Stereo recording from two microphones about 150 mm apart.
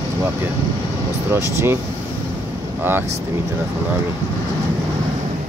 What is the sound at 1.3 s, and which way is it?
Speech, 15° right (ahead or behind).